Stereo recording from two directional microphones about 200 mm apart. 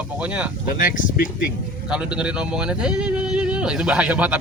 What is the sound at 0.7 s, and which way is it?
Speech, 45° left (ahead or behind).